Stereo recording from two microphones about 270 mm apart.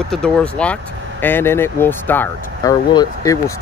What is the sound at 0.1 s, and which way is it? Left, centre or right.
Speech, centre.